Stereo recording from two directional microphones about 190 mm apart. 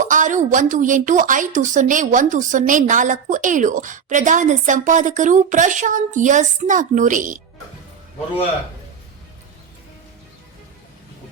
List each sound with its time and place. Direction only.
0.0 s a woman's voice: 40° right (ahead or behind)